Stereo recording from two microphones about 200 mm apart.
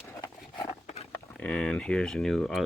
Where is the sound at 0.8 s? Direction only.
30° left (ahead or behind).